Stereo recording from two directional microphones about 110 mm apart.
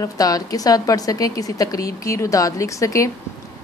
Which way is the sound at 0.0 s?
35° left (ahead or behind).